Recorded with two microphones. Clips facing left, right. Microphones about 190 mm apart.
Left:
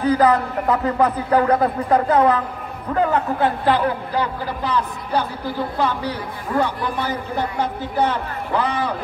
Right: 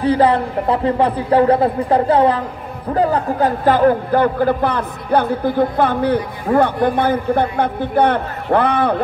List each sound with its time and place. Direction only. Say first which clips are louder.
0.0 s a man's voice: right 2 dB; 30° right (ahead or behind); by 8.9 s 60° right (ahead or behind)